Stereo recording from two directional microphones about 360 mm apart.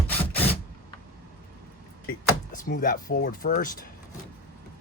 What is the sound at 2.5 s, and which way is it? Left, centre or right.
Speech, left.